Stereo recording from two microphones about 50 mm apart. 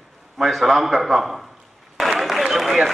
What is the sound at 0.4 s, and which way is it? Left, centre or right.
A man's voice, centre.